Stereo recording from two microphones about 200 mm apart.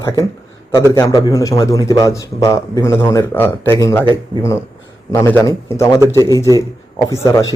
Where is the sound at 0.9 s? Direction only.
15° left (ahead or behind).